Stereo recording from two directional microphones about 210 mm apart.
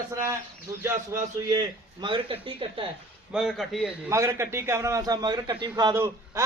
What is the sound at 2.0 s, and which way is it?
Speech, 25° right (ahead or behind).